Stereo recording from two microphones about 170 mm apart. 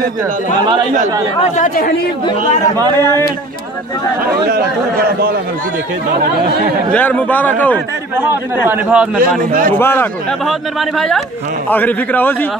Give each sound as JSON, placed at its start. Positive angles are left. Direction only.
{"t": 1.4, "sound": "speech", "side_deg": 50}
{"t": 2.7, "sound": "speech", "side_deg": -25}
{"t": 4.3, "sound": "speech", "side_deg": -65}
{"t": 6.9, "sound": "speech", "side_deg": 10}
{"t": 8.2, "sound": "a man's voice", "side_deg": -10}
{"t": 9.2, "sound": "a man's voice", "side_deg": -55}
{"t": 9.8, "sound": "speech", "side_deg": 15}
{"t": 10.4, "sound": "speech", "side_deg": 0}